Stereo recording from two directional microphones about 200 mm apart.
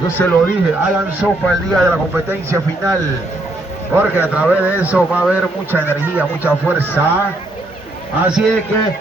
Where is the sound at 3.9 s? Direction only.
10° right (ahead or behind).